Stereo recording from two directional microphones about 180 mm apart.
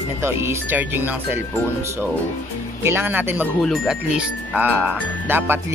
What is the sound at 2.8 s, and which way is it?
Speech, 10° right (ahead or behind).